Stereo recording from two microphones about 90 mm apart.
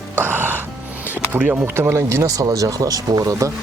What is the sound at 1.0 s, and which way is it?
Speech, 20° right (ahead or behind).